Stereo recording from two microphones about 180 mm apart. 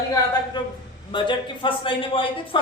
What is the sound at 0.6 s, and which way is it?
A man's voice, 25° left (ahead or behind).